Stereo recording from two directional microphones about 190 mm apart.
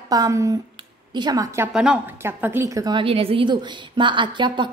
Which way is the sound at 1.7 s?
5° right (ahead or behind).